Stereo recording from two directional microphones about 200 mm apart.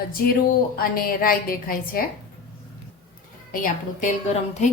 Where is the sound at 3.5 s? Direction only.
45° left (ahead or behind).